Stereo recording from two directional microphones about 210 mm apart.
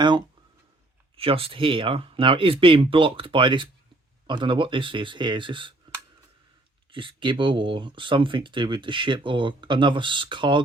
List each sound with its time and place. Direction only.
1.1 s speech: 25° right (ahead or behind)
6.9 s speech: 25° right (ahead or behind)